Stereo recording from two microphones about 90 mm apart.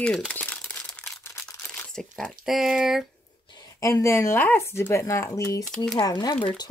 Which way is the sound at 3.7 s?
35° left (ahead or behind).